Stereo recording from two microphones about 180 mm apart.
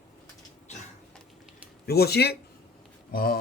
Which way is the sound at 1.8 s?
60° left (ahead or behind).